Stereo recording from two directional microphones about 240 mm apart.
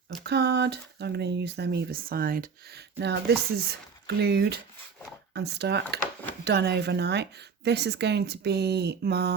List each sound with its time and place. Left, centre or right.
0.3 s speech: right